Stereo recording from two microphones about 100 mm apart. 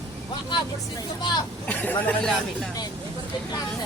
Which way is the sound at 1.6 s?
15° left (ahead or behind).